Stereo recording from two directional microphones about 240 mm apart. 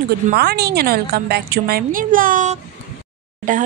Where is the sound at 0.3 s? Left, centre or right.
Right.